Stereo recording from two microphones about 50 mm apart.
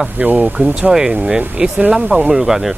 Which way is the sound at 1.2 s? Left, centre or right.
Centre.